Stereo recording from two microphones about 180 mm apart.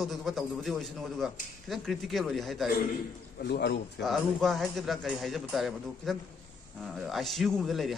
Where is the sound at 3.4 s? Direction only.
70° left (ahead or behind).